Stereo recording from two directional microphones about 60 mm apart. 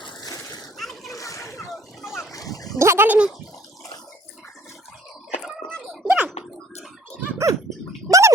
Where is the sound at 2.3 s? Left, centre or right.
Left.